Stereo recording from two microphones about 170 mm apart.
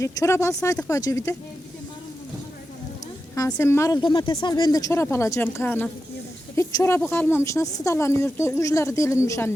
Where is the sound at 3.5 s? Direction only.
15° left (ahead or behind).